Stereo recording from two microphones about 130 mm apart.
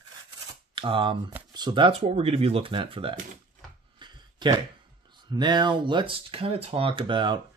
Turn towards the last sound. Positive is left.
turn(degrees=-35)  # may be behind; listen again after turning